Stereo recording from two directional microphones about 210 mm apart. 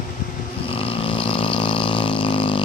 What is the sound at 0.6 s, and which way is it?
Vehicle, 25° left (ahead or behind).